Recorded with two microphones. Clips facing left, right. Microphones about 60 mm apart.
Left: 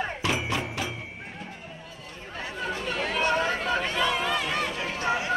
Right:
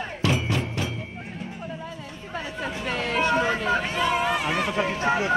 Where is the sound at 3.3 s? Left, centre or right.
Centre.